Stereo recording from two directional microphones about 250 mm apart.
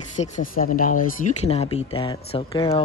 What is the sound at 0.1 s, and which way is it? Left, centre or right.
Speech, left.